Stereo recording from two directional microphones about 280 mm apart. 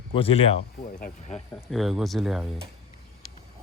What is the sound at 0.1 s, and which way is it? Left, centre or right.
Speech, centre.